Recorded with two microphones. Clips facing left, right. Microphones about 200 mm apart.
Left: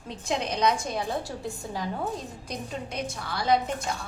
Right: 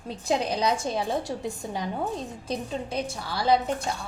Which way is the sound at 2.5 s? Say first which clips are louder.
Right 5 dB; 30° right (ahead or behind).